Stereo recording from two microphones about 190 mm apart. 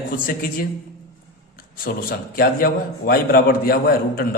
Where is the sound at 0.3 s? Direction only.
50° left (ahead or behind).